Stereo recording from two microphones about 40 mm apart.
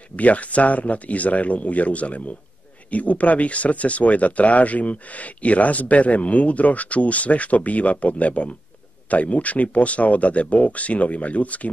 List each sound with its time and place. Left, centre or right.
0.1 s speech: left